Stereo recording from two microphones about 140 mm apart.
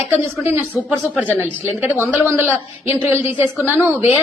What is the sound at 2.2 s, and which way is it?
A woman's voice, 15° right (ahead or behind).